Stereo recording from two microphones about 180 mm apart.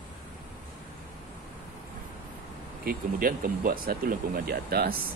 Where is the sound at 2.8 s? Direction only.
55° right (ahead or behind).